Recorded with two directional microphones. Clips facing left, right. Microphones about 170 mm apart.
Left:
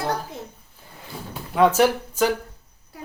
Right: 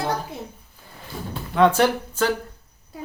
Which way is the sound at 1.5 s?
5° left (ahead or behind).